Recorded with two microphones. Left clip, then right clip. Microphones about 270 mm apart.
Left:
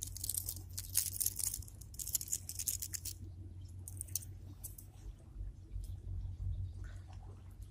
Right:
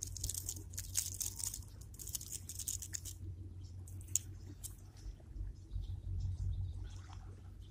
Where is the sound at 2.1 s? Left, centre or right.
Centre.